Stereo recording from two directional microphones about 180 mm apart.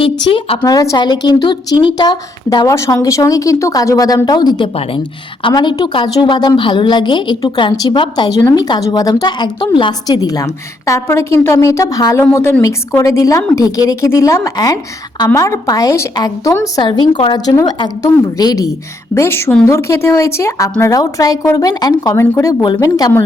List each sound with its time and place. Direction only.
0.3 s a woman's voice: 30° left (ahead or behind)
0.6 s a woman's voice: 20° left (ahead or behind)